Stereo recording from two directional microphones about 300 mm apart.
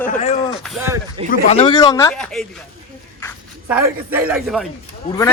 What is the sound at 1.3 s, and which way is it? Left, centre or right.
A man's voice, left.